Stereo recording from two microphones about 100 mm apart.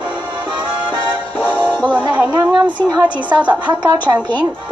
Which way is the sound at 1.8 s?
15° right (ahead or behind).